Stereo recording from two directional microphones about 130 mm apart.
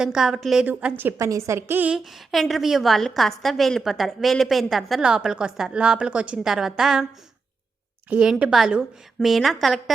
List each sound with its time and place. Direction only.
0.0 s a woman's voice: 5° right (ahead or behind)
2.0 s a woman's voice: centre (ahead or behind)
8.1 s a woman's voice: 10° right (ahead or behind)